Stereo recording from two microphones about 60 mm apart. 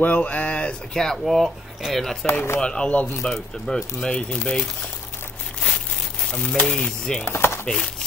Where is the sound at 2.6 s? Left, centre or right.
Centre.